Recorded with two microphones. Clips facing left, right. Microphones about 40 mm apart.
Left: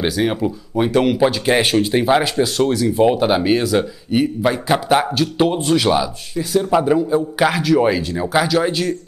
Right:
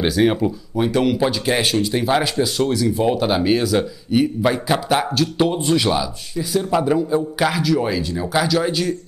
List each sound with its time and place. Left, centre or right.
0.0 s speech: centre
0.7 s speech: centre
1.8 s speech: left
2.0 s speech: centre
5.6 s speech: centre
5.9 s speech: centre